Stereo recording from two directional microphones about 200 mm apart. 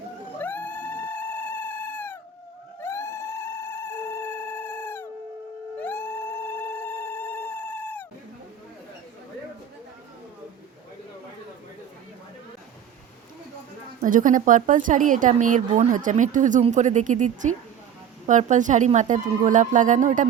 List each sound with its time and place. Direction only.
0.3 s cat: 10° left (ahead or behind)
2.8 s a sound: 15° left (ahead or behind)
14.0 s a woman's voice: 40° right (ahead or behind)